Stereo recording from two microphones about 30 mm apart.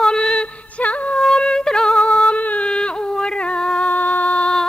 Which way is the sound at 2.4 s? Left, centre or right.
Left.